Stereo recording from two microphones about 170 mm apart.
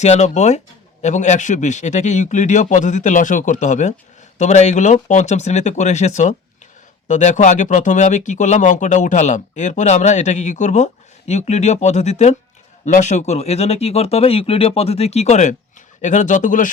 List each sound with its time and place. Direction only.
0.0 s speech: 40° left (ahead or behind)